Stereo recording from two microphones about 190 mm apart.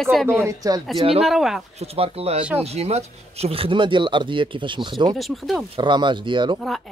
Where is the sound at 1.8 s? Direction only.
30° right (ahead or behind).